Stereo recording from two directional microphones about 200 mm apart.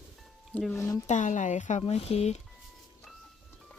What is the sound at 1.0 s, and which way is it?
Speech, 35° left (ahead or behind).